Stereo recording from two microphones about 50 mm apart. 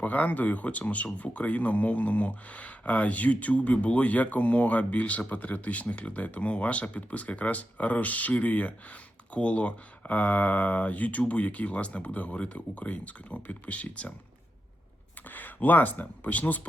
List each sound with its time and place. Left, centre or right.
0.0 s speech: left
15.3 s speech: left